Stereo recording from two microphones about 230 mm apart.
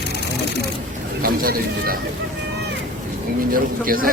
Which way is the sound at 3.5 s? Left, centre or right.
Right.